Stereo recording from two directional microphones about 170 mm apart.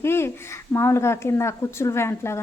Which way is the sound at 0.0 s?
15° left (ahead or behind).